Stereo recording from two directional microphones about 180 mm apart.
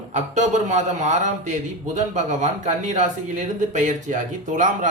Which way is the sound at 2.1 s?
40° right (ahead or behind).